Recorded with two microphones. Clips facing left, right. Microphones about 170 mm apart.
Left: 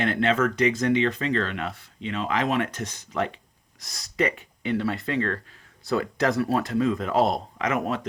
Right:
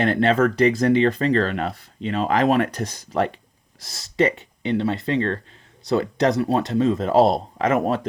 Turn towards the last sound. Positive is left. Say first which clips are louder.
# right 6 dB
turn(degrees=-35)  # may be behind; listen again after turning